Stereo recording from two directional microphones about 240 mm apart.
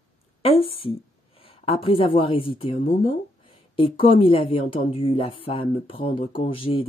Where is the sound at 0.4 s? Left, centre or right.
Left.